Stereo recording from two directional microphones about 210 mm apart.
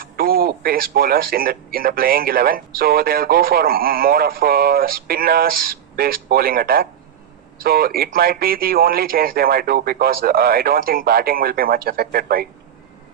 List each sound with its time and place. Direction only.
0.2 s speech: 45° right (ahead or behind)